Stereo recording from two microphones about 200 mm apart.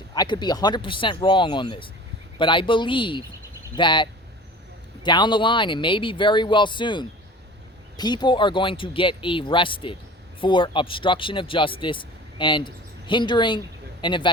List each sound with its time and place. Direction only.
0.1 s speech: 20° left (ahead or behind)